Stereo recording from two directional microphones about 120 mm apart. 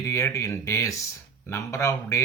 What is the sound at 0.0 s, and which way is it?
Speech, 25° left (ahead or behind).